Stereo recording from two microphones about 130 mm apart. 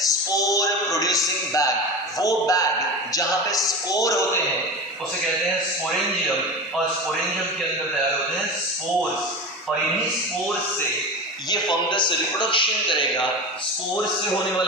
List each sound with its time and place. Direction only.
0.1 s a sound: 25° left (ahead or behind)
2.1 s speech: 25° left (ahead or behind)
11.5 s a man's voice: 35° left (ahead or behind)